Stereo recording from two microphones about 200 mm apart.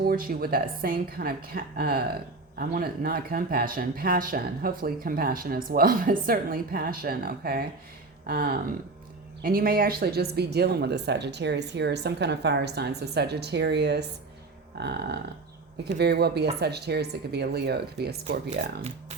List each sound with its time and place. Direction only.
0.0 s speech: 45° right (ahead or behind)